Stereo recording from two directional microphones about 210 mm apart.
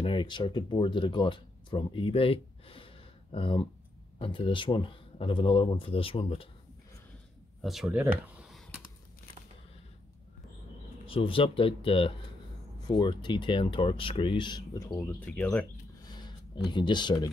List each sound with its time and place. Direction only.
0.0 s speech: 20° left (ahead or behind)
7.6 s computer keyboard: centre (ahead or behind)
11.1 s speech: 25° left (ahead or behind); by 15.6 s 5° left (ahead or behind)
16.1 s a sound: 20° left (ahead or behind)